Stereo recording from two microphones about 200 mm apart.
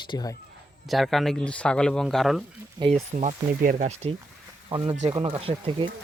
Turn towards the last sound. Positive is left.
turn(degrees=-25)  # may be behind; listen again after turning